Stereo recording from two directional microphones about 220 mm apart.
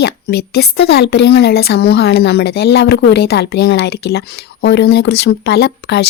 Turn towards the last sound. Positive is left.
turn(degrees=45)  # may be behind; listen again after turning